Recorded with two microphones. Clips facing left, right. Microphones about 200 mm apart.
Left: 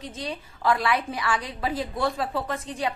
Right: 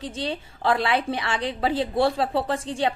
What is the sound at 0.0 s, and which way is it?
A woman's voice, 30° right (ahead or behind).